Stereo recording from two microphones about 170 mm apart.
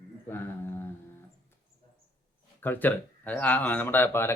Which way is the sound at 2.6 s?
10° left (ahead or behind).